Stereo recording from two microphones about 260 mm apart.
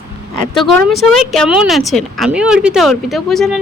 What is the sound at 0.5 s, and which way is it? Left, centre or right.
Speech, centre.